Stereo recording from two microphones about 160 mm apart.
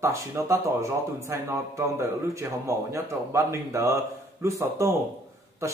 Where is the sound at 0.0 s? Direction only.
20° right (ahead or behind).